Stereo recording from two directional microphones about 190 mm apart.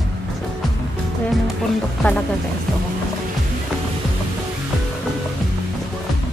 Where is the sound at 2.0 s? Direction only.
5° left (ahead or behind).